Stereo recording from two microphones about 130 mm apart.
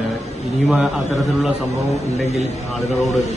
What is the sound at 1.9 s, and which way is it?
Speech, 55° left (ahead or behind).